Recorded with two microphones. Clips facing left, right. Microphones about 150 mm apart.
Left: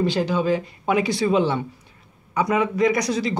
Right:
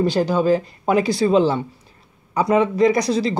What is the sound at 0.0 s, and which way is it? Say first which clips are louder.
Speech: right 3 dB; 40° right (ahead or behind).